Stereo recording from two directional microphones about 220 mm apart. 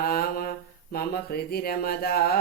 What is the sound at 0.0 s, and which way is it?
Mantra, 45° left (ahead or behind).